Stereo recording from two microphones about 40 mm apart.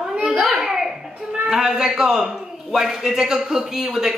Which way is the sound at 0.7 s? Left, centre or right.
Centre.